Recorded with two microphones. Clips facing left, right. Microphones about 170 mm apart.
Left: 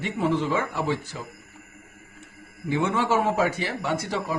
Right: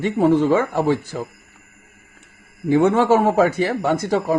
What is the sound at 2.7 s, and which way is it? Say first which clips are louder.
A man's voice: right 9 dB; 50° right (ahead or behind).